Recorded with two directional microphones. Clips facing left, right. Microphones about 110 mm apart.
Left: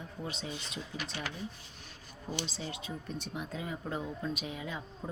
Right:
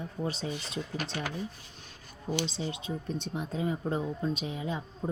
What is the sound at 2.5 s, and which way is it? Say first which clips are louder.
Speech: right 5 dB; 20° right (ahead or behind).